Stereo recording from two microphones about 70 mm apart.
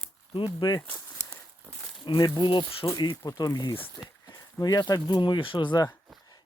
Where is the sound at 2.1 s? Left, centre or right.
Left.